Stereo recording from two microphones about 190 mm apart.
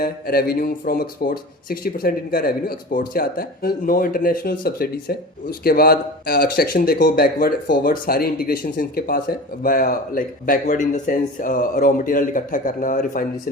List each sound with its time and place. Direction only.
0.0 s speech: 55° left (ahead or behind)